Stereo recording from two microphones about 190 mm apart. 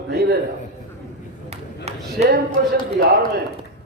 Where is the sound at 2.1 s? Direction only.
55° right (ahead or behind).